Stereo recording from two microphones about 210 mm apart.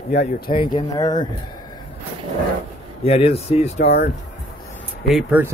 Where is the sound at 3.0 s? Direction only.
30° left (ahead or behind).